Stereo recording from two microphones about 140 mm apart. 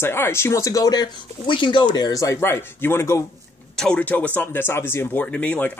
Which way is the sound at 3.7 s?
5° left (ahead or behind).